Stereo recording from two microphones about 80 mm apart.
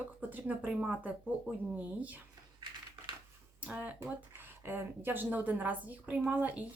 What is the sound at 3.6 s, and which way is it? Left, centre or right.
Speech, centre.